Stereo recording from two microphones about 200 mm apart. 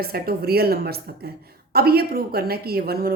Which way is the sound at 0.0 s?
50° right (ahead or behind).